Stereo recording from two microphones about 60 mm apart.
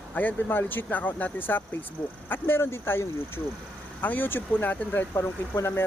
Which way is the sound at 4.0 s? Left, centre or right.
Left.